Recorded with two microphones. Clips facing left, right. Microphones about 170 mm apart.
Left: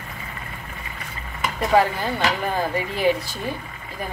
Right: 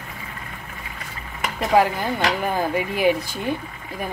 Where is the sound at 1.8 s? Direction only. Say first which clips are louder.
Right 2 dB; 10° right (ahead or behind).